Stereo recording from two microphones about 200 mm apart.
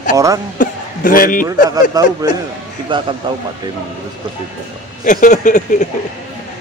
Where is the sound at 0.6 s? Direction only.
45° left (ahead or behind).